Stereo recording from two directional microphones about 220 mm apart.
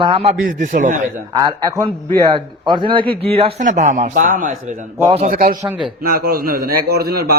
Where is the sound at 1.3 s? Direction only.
15° right (ahead or behind); by 5.6 s 40° right (ahead or behind).